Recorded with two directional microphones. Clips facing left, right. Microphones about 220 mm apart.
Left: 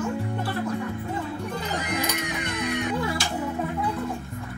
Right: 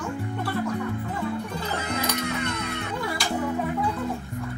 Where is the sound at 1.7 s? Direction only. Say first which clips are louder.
Even; 15° left (ahead or behind).